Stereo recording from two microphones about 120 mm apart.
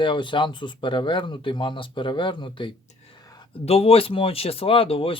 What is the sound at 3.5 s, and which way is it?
Speech, 55° left (ahead or behind).